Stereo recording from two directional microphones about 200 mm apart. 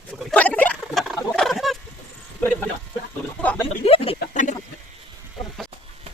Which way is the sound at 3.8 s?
30° left (ahead or behind).